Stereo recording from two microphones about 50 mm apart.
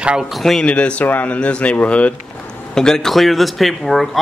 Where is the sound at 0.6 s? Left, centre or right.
Left.